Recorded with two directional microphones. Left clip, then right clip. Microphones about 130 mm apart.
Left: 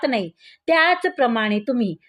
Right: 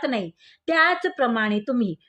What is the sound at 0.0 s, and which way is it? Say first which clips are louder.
Speech: left 4 dB; 30° left (ahead or behind).